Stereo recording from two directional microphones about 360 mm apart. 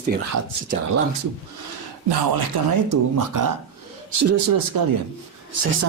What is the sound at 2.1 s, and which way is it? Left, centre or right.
A man's voice, right.